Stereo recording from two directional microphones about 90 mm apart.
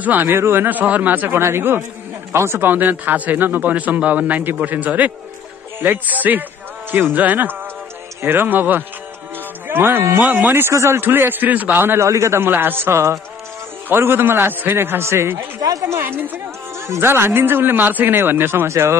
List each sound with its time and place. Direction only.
0.0 s speech: 20° right (ahead or behind)